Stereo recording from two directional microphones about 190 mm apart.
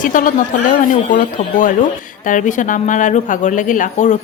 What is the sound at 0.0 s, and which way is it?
A woman's voice, 45° left (ahead or behind).